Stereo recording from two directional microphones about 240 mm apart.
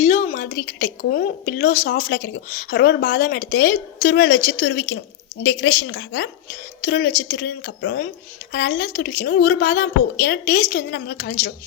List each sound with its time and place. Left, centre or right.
0.0 s a woman's voice: left